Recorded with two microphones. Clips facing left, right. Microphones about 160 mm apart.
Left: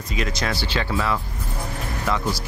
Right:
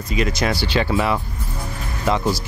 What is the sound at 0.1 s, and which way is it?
Speech, 5° right (ahead or behind).